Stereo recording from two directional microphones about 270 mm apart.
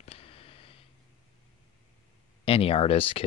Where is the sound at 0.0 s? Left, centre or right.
Left.